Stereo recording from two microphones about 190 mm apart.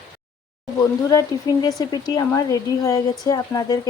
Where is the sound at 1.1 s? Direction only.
20° left (ahead or behind).